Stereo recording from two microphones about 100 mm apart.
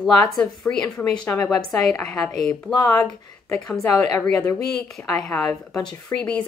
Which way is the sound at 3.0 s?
25° left (ahead or behind).